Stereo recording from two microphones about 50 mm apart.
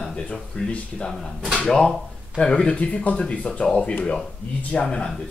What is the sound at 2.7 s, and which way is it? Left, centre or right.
Speech, left.